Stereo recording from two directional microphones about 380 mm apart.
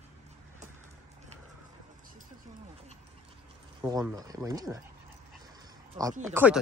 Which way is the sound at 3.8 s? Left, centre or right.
Centre.